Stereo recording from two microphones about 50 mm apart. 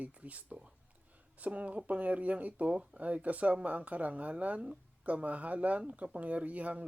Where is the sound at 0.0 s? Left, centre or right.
Right.